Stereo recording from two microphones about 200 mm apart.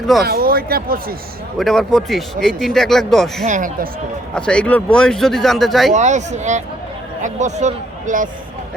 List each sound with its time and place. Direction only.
0.3 s speech: 50° right (ahead or behind)
1.5 s speech: centre (ahead or behind)
3.4 s speech: 40° right (ahead or behind)
4.4 s speech: 5° left (ahead or behind)
5.9 s speech: 35° right (ahead or behind)